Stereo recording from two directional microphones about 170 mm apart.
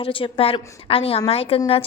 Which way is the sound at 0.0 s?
30° left (ahead or behind).